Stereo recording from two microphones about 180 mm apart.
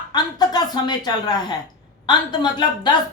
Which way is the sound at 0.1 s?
20° left (ahead or behind).